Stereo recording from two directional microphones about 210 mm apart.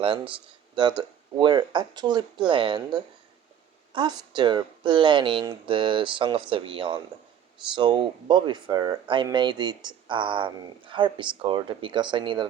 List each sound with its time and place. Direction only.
0.0 s speech: 25° right (ahead or behind)